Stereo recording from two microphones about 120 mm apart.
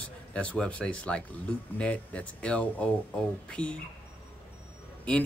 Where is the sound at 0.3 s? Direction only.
10° left (ahead or behind).